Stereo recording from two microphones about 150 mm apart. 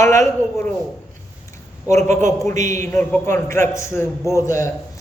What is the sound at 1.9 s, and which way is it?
Speech, 50° right (ahead or behind).